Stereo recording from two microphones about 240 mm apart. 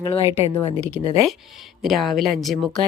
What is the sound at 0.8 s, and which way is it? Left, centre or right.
Speech, left.